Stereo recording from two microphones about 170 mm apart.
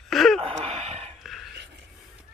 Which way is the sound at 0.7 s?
35° right (ahead or behind).